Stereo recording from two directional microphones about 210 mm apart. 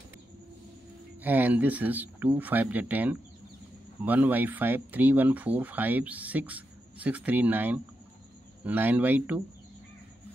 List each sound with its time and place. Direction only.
1.2 s speech: 10° right (ahead or behind)